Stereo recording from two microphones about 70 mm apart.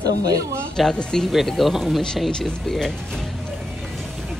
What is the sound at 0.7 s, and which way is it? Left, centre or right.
Speech, centre.